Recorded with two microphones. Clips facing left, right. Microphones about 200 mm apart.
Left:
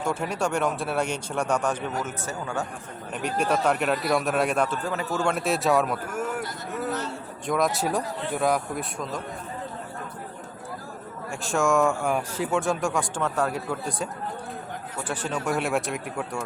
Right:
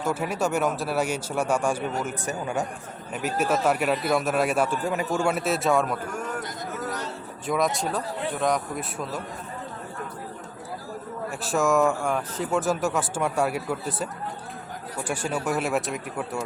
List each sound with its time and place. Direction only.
0.0 s speech: 5° right (ahead or behind)
3.2 s a man's voice: 5° right (ahead or behind)
7.4 s a man's voice: centre (ahead or behind)
11.4 s a man's voice: centre (ahead or behind)